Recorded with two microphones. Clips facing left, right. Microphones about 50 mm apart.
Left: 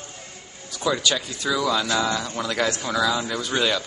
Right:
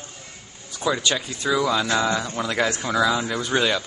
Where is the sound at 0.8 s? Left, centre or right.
Centre.